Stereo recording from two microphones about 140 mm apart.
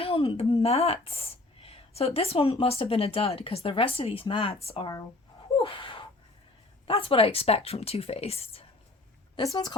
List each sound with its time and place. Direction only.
0.0 s a woman's voice: 40° left (ahead or behind)
5.5 s gasp: 40° left (ahead or behind)
6.8 s a woman's voice: 40° left (ahead or behind)
9.3 s a woman's voice: 25° left (ahead or behind)